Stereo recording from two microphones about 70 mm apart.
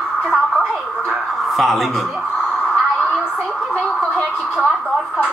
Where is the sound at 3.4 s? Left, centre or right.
Centre.